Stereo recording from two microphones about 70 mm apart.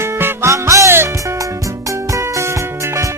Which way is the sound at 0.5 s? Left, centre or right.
Right.